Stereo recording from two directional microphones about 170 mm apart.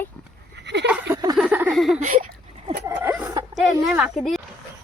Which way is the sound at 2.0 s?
45° right (ahead or behind).